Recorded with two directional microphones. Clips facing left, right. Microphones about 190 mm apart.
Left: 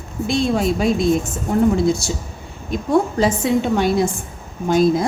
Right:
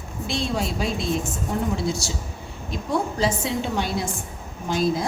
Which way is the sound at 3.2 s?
50° left (ahead or behind).